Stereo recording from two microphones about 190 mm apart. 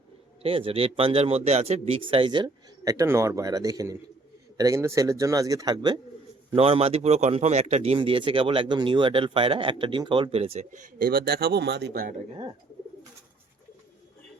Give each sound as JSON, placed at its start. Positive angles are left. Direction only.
{"t": 0.4, "sound": "a man's voice", "side_deg": -30}